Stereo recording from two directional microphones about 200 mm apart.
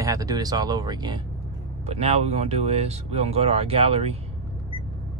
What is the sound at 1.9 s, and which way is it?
Speech, 30° right (ahead or behind).